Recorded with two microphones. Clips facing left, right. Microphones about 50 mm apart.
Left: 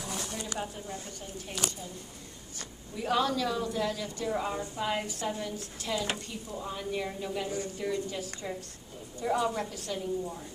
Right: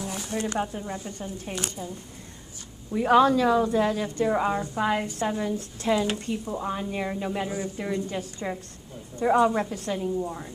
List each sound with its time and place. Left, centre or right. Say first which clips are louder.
0.5 s speech: right 7 dB; right
2.9 s speech: right 10 dB; right